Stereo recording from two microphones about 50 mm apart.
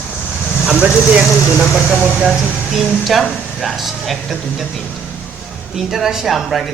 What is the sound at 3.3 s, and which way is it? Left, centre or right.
A man's voice, centre.